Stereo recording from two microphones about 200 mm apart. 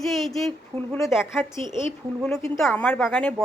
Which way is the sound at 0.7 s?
25° right (ahead or behind).